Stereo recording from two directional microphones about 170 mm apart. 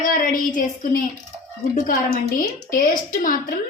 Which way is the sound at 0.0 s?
55° left (ahead or behind).